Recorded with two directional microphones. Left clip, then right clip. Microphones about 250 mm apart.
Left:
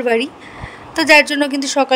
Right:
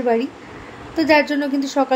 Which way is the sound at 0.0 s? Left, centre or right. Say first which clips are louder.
Left 3 dB; left.